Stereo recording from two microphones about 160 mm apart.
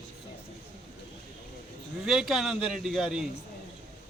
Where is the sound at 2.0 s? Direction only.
Centre (ahead or behind).